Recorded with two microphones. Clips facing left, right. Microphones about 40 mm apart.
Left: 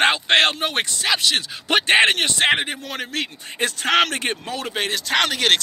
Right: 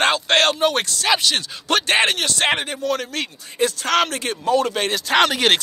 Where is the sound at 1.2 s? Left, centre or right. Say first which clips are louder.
Even; centre.